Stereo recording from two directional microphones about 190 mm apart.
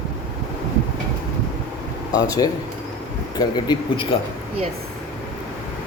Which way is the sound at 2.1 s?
20° left (ahead or behind).